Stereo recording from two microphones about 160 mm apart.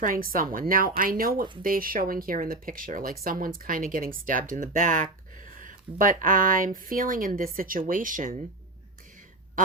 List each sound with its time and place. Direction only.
0.0 s speech: 60° right (ahead or behind)